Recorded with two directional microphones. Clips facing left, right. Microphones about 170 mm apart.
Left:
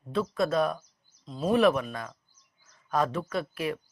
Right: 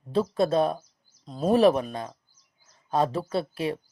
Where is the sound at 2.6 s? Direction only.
30° right (ahead or behind).